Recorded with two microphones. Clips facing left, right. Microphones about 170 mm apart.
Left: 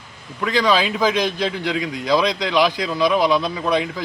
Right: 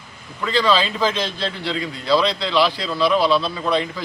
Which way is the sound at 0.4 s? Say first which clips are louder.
Left 1 dB; 15° left (ahead or behind).